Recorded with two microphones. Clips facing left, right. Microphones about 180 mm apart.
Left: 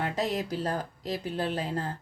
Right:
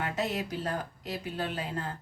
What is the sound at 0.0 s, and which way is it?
Speech, 35° left (ahead or behind).